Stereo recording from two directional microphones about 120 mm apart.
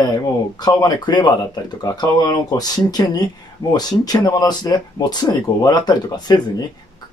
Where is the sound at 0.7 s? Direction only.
35° left (ahead or behind).